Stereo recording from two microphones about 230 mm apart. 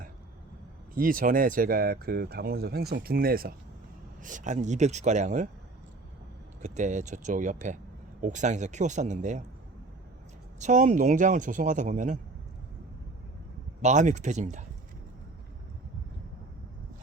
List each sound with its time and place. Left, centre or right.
0.9 s speech: right
6.6 s speech: right
10.6 s speech: right
13.8 s speech: right